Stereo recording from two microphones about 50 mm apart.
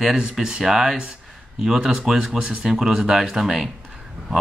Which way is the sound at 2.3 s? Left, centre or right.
Right.